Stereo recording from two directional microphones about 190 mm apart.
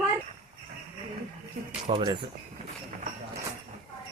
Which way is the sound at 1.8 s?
25° right (ahead or behind).